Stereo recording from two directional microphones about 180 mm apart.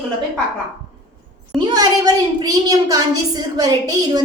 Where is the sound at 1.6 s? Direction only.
20° right (ahead or behind).